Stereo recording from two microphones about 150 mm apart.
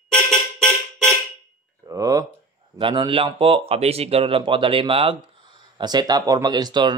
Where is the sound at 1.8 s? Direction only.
20° right (ahead or behind).